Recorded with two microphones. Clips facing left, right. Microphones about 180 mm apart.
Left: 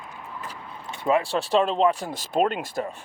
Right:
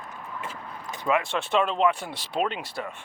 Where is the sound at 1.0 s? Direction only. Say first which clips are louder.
Left 3 dB; 35° left (ahead or behind).